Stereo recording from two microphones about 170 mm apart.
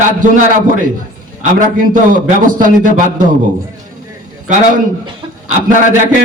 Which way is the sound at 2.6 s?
50° right (ahead or behind).